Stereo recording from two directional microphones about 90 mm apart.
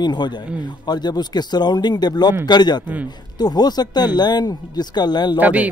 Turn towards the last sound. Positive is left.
turn(degrees=-15)  # may be behind; listen again after turning